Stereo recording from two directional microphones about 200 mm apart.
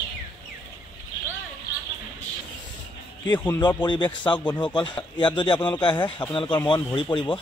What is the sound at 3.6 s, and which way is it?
A man's voice, 20° left (ahead or behind).